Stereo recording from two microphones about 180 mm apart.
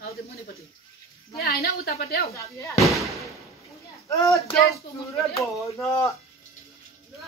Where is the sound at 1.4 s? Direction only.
60° left (ahead or behind).